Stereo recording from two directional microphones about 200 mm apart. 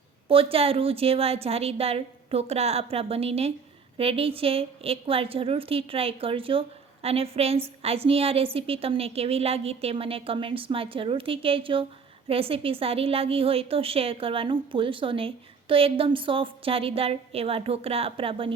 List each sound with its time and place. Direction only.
0.3 s a woman's voice: 30° right (ahead or behind)